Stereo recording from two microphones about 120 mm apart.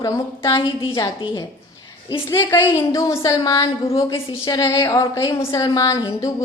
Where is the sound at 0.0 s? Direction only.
30° left (ahead or behind).